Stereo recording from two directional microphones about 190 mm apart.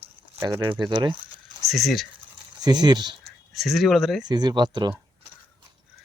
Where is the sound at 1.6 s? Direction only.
Centre (ahead or behind).